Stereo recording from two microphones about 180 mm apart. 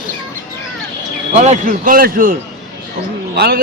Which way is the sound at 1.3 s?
40° right (ahead or behind).